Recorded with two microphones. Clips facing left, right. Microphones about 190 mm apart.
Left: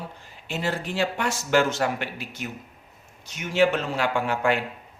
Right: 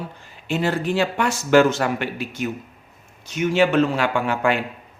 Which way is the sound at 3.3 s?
80° right.